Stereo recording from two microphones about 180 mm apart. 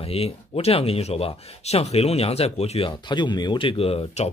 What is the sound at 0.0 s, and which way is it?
Speech, 35° left (ahead or behind).